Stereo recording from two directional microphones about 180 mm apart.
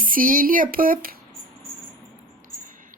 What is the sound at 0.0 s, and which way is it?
Speech, 50° right (ahead or behind).